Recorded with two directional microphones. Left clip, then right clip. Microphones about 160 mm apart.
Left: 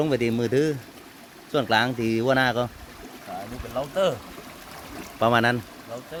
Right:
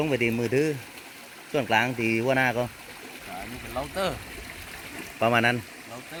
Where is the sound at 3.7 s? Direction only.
55° left (ahead or behind).